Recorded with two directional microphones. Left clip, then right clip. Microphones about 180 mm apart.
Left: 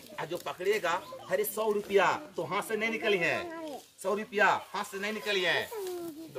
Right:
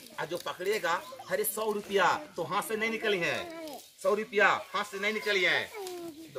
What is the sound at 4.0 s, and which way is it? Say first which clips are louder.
Speech: right 2 dB; 40° left (ahead or behind).